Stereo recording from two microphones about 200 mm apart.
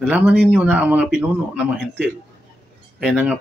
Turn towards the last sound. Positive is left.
turn(degrees=-5)  # may be behind; listen again after turning